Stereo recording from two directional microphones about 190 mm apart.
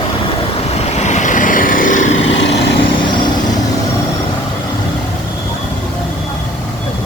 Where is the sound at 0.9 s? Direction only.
35° left (ahead or behind).